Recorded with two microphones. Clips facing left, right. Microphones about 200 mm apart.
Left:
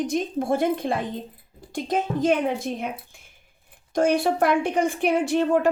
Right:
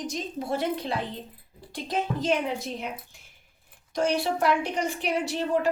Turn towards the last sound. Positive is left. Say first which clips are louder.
# left 6 dB
turn(degrees=50)  # may be behind; listen again after turning